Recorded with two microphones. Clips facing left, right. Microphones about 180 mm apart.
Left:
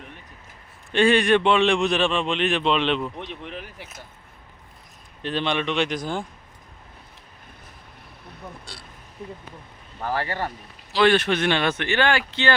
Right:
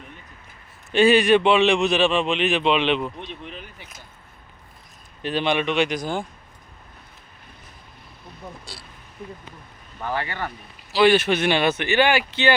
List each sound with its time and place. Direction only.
0.9 s a man's voice: 5° right (ahead or behind)
3.2 s speech: 75° left (ahead or behind)
5.2 s speech: 10° right (ahead or behind)
10.0 s speech: 35° left (ahead or behind)
10.9 s speech: 5° right (ahead or behind)